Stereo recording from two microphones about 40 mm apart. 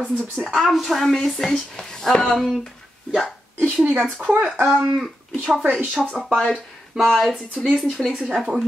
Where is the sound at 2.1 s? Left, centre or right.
Left.